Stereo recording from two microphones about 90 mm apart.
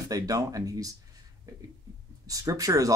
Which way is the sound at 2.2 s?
40° right (ahead or behind).